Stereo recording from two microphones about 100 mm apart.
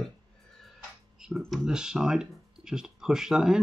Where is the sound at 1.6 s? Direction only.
5° right (ahead or behind).